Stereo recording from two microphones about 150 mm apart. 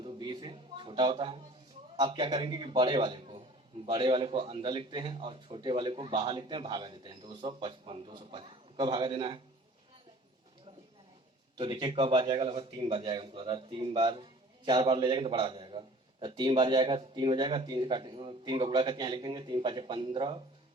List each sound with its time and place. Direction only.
0.0 s a sound: 25° right (ahead or behind)
2.0 s a man's voice: 30° right (ahead or behind)
11.5 s a man's voice: 35° right (ahead or behind)